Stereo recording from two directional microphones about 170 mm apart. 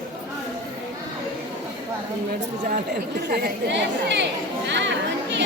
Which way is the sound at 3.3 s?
80° right.